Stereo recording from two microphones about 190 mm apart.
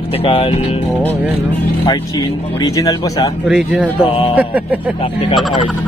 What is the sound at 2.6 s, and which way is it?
Speech, 20° left (ahead or behind).